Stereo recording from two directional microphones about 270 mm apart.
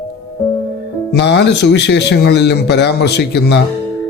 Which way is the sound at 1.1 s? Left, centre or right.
Left.